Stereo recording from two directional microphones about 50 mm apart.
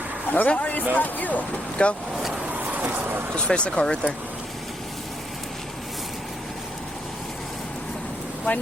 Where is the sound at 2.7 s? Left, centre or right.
Right.